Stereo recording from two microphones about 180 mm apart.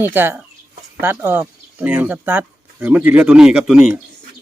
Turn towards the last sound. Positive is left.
turn(degrees=-5)  # may be behind; listen again after turning